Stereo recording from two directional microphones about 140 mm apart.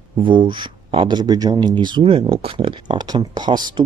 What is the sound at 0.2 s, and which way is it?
Speech, 35° right (ahead or behind).